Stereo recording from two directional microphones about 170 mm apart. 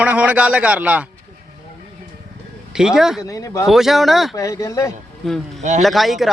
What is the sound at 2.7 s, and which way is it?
Speech, 5° right (ahead or behind).